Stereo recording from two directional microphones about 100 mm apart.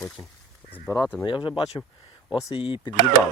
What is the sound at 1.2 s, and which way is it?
Speech, 55° left (ahead or behind).